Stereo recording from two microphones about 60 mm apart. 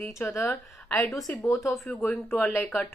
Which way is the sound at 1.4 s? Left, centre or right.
Left.